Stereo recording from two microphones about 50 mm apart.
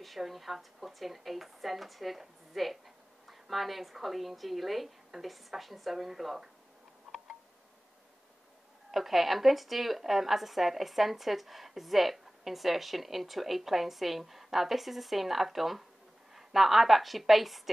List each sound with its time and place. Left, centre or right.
0.0 s a woman's voice: centre
7.1 s tick: centre
8.9 s a woman's voice: centre